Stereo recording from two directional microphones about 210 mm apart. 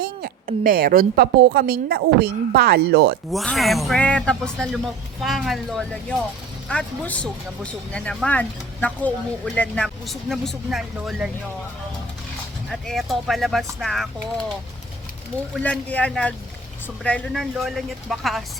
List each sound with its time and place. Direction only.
0.0 s a woman's voice: 45° right (ahead or behind)
3.3 s speech: centre (ahead or behind)
12.7 s speech: centre (ahead or behind)
15.6 s speech: 5° left (ahead or behind)